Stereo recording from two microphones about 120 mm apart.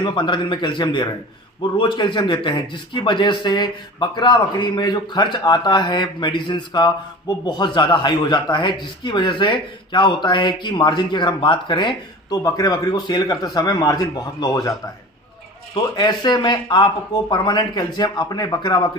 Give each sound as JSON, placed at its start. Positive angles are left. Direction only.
{"t": 0.0, "sound": "a man's voice", "side_deg": 40}